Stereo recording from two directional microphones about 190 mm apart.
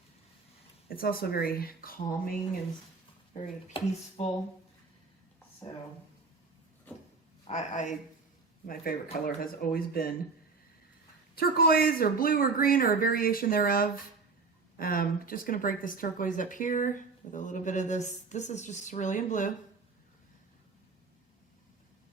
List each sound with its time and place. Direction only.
0.9 s speech: 50° left (ahead or behind)
3.3 s speech: 30° left (ahead or behind)
7.4 s speech: 40° left (ahead or behind)
11.3 s speech: 50° left (ahead or behind)